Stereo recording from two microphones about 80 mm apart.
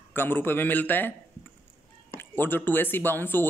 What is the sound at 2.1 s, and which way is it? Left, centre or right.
Speech, left.